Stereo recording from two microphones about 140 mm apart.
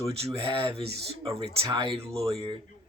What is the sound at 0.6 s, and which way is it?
Speech, 45° right (ahead or behind).